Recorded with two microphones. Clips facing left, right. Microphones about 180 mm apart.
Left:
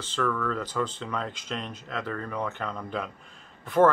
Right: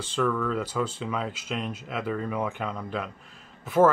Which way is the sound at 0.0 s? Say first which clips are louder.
Right 2 dB; 10° right (ahead or behind).